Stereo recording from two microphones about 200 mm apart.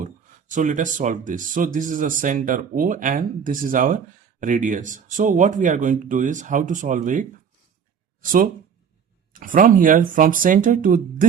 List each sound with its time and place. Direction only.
0.5 s speech: 40° right (ahead or behind)